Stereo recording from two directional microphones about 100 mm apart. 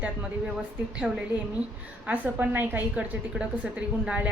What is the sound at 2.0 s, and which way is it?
A woman's voice, 15° right (ahead or behind).